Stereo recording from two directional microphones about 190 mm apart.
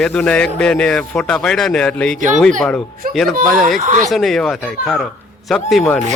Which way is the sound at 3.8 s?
40° right (ahead or behind).